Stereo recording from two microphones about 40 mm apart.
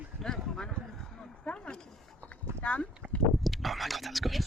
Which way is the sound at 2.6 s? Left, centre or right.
Left.